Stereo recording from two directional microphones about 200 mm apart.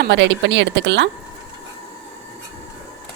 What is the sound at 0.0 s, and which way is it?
Speech, 65° right (ahead or behind).